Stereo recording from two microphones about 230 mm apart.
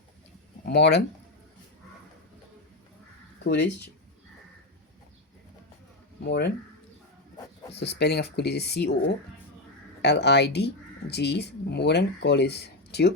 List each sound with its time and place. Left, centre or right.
0.6 s speech: left
3.4 s speech: left
6.2 s speech: left
7.8 s speech: left
10.0 s speech: left